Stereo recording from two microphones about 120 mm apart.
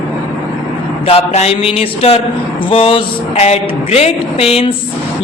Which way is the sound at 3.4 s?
60° left (ahead or behind).